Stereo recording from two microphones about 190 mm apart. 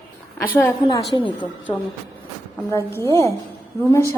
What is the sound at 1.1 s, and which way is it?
Speech, 25° left (ahead or behind).